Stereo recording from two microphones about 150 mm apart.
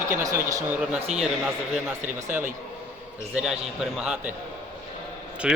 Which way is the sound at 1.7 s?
15° right (ahead or behind).